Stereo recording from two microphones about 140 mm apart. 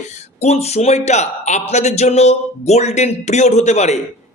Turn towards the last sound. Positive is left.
turn(degrees=55)  # may be behind; listen again after turning